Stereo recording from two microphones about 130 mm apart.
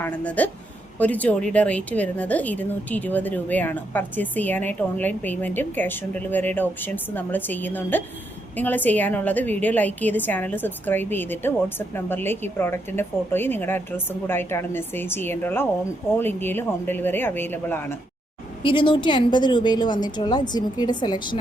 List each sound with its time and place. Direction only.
0.0 s a woman's voice: 10° left (ahead or behind)
18.6 s a woman's voice: 40° left (ahead or behind)